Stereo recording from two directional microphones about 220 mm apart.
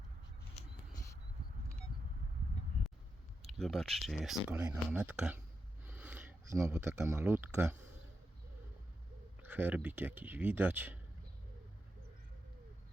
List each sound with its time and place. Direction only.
3.6 s speech: centre (ahead or behind)
9.4 s speech: 10° right (ahead or behind)